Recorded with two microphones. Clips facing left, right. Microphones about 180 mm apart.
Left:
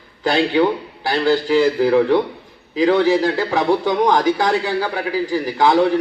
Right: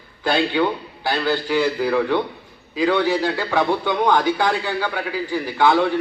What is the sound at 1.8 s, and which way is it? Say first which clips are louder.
Speech: left 5 dB; 30° left (ahead or behind).